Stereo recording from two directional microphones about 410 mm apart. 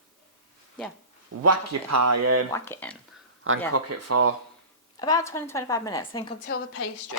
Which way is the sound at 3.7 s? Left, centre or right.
Right.